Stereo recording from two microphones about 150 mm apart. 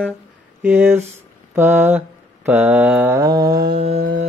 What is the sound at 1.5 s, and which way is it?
Mantra, 15° right (ahead or behind).